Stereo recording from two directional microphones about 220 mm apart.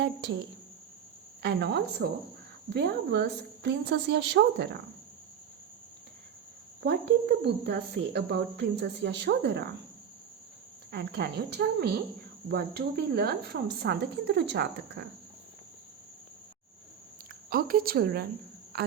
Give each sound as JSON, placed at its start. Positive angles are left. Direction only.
{"t": 0.0, "sound": "speech", "side_deg": -50}
{"t": 1.4, "sound": "speech", "side_deg": -50}
{"t": 7.4, "sound": "speech", "side_deg": -50}
{"t": 10.9, "sound": "speech", "side_deg": -45}
{"t": 17.5, "sound": "a woman's voice", "side_deg": -40}